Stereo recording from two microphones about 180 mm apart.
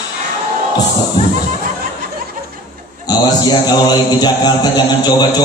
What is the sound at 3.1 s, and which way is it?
Mantra, 20° left (ahead or behind).